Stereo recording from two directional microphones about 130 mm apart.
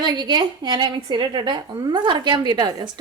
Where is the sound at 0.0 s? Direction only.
35° right (ahead or behind).